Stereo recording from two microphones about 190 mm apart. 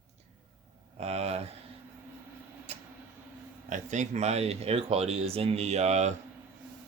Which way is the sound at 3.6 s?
40° right (ahead or behind).